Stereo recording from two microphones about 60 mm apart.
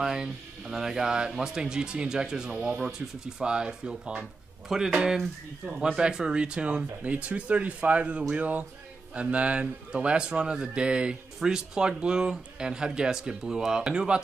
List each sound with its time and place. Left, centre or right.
0.0 s speech: centre